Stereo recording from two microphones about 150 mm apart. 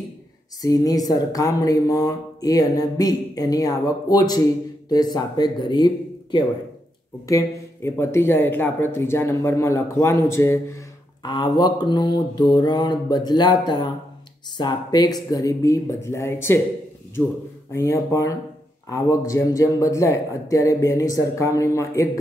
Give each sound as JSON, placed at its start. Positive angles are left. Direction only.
{"t": 0.6, "sound": "speech", "side_deg": 25}
{"t": 7.2, "sound": "speech", "side_deg": 20}
{"t": 11.2, "sound": "speech", "side_deg": 30}